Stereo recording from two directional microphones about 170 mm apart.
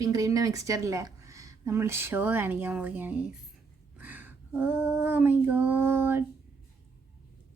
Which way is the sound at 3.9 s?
10° right (ahead or behind).